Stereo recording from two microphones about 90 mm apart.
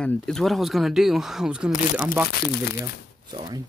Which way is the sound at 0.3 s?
Centre (ahead or behind).